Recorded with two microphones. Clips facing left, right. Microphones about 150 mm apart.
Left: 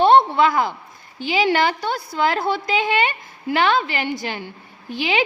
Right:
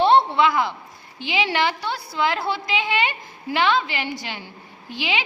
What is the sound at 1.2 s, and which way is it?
A woman's voice, 45° left (ahead or behind).